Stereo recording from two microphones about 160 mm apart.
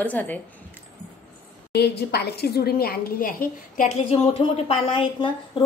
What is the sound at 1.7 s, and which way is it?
A woman's voice, 90° left.